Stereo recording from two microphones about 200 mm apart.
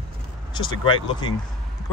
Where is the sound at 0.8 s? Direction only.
25° left (ahead or behind).